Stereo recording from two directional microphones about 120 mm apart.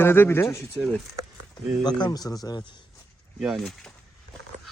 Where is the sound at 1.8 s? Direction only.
35° left (ahead or behind).